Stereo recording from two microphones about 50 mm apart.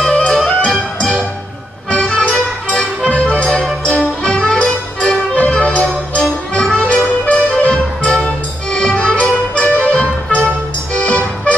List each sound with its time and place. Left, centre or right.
0.1 s music: left
0.7 s music: centre; by 11.2 s left